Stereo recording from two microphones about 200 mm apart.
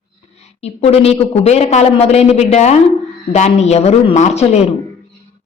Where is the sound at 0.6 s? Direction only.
30° left (ahead or behind).